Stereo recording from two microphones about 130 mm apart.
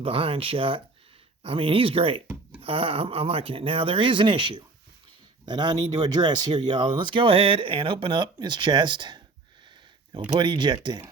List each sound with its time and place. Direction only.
0.0 s speech: 45° right (ahead or behind)
10.3 s speech: 35° right (ahead or behind)